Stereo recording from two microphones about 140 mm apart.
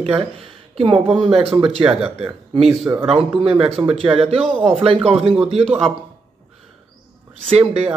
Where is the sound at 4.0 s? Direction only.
45° right (ahead or behind).